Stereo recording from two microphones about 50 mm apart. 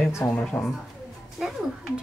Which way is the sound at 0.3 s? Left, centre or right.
Left.